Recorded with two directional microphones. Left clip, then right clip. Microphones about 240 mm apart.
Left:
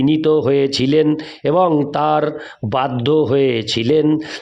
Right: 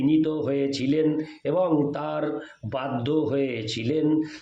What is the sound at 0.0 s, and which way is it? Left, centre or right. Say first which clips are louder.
Speech: left 9 dB; left.